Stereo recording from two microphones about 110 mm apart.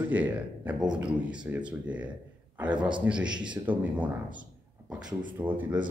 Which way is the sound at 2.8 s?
45° right (ahead or behind).